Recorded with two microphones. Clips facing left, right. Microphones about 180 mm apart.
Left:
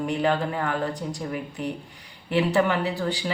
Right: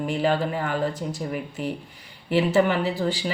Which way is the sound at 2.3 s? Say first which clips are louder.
Right 2 dB; centre (ahead or behind).